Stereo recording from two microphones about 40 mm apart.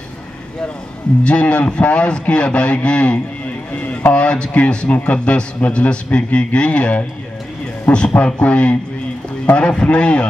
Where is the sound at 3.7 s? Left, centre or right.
Left.